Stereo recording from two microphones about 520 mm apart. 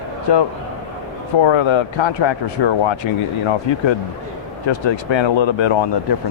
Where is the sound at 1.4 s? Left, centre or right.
Left.